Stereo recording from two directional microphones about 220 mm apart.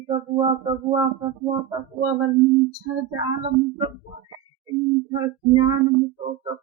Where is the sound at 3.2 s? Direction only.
20° right (ahead or behind).